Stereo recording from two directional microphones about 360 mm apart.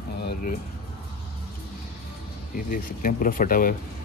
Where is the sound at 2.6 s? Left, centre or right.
Left.